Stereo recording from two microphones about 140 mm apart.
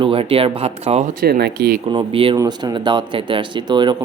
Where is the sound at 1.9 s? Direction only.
40° right (ahead or behind).